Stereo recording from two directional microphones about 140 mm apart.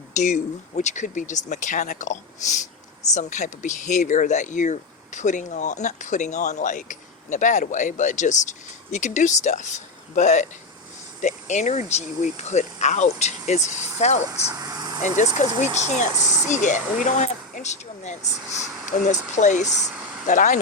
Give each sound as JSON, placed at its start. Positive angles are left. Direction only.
{"t": 0.2, "sound": "speech", "side_deg": 60}
{"t": 14.5, "sound": "vehicle", "side_deg": -30}
{"t": 15.0, "sound": "speech", "side_deg": 60}